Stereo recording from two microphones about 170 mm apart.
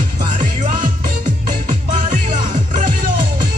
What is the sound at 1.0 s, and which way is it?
Music, 55° right (ahead or behind).